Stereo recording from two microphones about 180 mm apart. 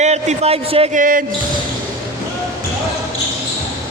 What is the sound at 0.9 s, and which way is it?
Speech, 50° right (ahead or behind).